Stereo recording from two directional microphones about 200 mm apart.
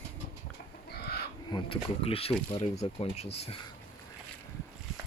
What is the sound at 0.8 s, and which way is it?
Chicken, 55° left (ahead or behind).